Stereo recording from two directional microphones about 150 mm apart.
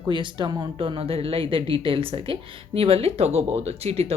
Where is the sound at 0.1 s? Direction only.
30° right (ahead or behind).